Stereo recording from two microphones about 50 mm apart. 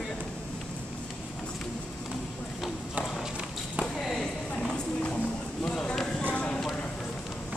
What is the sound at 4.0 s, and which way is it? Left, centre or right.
Music, centre.